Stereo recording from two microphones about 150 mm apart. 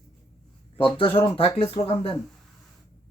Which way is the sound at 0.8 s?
35° left (ahead or behind).